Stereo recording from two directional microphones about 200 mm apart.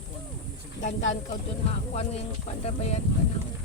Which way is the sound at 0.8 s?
35° left (ahead or behind).